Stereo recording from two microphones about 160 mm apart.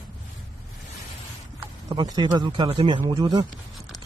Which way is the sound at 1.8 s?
25° right (ahead or behind).